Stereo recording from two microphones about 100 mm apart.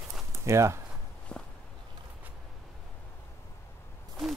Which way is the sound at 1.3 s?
10° left (ahead or behind).